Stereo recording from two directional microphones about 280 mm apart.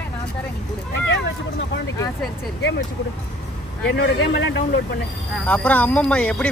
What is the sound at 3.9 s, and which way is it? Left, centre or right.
Speech, left.